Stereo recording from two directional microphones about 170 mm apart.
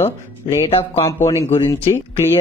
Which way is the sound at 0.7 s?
35° left (ahead or behind).